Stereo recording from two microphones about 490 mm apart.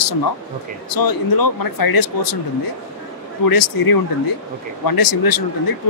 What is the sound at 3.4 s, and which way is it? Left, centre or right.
Speech, left.